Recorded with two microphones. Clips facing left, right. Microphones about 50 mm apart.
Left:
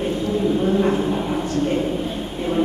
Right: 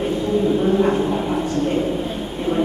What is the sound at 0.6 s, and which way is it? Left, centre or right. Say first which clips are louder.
Bow-wow: right 2 dB; centre.